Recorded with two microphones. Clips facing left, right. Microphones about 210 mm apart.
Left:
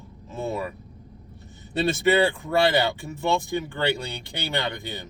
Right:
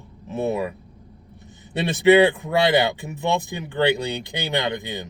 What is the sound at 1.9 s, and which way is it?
Speech, 15° right (ahead or behind).